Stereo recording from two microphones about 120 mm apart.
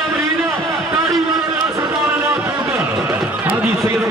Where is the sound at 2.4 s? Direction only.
15° right (ahead or behind).